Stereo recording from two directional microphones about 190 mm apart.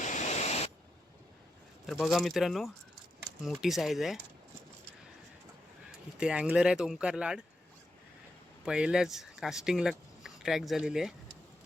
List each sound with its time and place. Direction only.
0.0 s static: 40° left (ahead or behind)
1.9 s speech: centre (ahead or behind)
6.1 s speech: 5° right (ahead or behind)
8.6 s speech: 5° right (ahead or behind)